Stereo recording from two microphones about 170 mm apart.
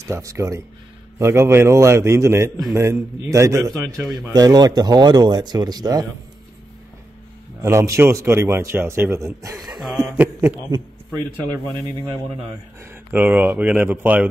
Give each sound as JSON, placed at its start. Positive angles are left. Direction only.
{"t": 0.0, "sound": "a man's voice", "side_deg": -15}
{"t": 7.6, "sound": "a man's voice", "side_deg": -15}
{"t": 10.0, "sound": "speech", "side_deg": -10}
{"t": 13.1, "sound": "a man's voice", "side_deg": -10}